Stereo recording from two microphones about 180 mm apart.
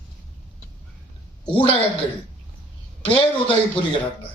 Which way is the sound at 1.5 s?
30° left (ahead or behind).